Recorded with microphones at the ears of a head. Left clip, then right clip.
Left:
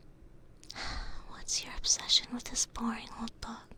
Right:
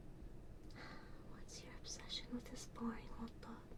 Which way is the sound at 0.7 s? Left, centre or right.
Left.